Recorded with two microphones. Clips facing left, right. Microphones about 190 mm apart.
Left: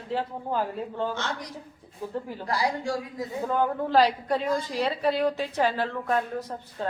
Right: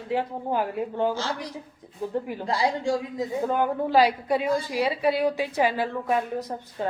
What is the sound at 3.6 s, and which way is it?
A woman's voice, 10° right (ahead or behind).